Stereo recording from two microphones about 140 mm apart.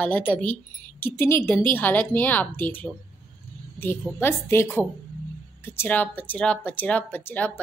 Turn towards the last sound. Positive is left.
turn(degrees=10)  # may be behind; listen again after turning